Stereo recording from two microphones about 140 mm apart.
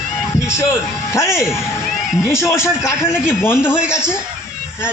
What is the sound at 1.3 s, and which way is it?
Speech, 5° right (ahead or behind).